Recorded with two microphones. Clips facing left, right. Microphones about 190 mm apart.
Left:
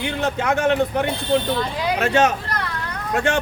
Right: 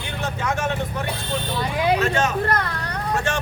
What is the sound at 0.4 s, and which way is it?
Speech, 60° left (ahead or behind).